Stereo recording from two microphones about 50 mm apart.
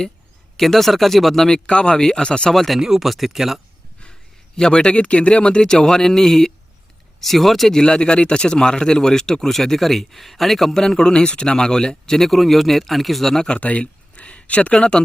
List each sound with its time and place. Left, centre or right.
0.5 s speech: centre
1.5 s speech: centre
2.5 s speech: centre
4.5 s speech: centre
7.7 s speech: centre
10.8 s speech: centre
13.6 s speech: left